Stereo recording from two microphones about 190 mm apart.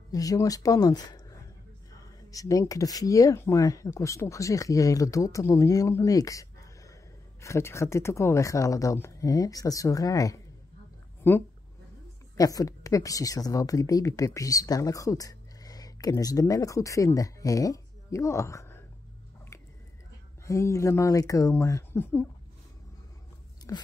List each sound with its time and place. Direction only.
0.1 s speech: 20° left (ahead or behind)
2.3 s speech: 15° left (ahead or behind)
20.4 s speech: 15° left (ahead or behind)
23.7 s speech: 15° left (ahead or behind)